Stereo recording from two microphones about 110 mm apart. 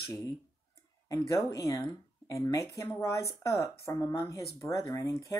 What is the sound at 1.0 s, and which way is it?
Speech, 30° left (ahead or behind).